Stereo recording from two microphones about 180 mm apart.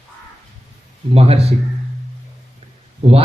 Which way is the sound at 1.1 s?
35° right (ahead or behind).